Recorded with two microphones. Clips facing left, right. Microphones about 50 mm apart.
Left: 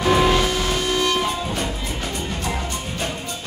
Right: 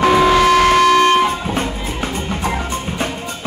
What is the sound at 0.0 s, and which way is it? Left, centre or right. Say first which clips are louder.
Music: right 6 dB; right.